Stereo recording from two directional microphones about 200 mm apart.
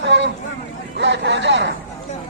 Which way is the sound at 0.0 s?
60° right (ahead or behind).